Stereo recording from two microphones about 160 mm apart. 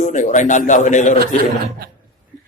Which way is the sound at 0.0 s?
50° left (ahead or behind).